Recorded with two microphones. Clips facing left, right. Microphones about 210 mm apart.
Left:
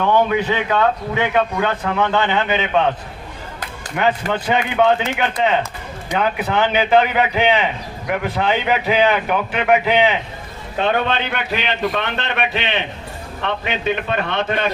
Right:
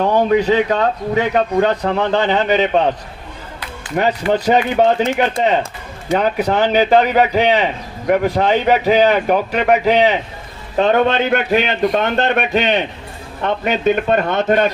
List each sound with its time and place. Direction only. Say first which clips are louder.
0.0 s a man's voice: right 3 dB; 40° right (ahead or behind)
3.9 s a man's voice: right 3 dB; 40° right (ahead or behind)